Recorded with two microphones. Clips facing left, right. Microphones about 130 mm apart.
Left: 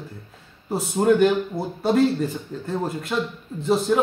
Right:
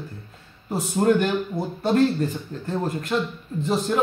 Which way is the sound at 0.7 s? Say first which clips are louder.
Left 1 dB; 5° left (ahead or behind).